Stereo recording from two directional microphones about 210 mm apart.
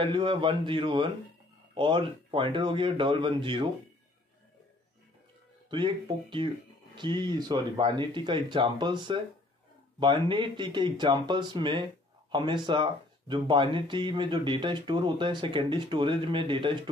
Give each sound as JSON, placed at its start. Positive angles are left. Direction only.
{"t": 0.0, "sound": "speech", "side_deg": -25}
{"t": 5.7, "sound": "speech", "side_deg": -20}